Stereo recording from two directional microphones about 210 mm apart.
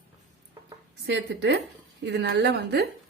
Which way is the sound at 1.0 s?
55° right (ahead or behind).